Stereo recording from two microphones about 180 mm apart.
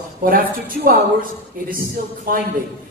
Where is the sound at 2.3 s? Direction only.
55° right (ahead or behind).